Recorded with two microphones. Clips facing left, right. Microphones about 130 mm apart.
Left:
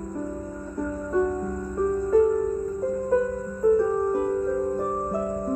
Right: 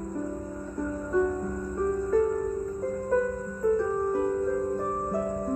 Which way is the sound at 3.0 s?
10° left (ahead or behind).